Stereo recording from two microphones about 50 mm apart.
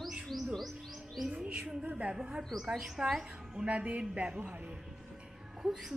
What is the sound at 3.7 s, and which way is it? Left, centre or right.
Speech, right.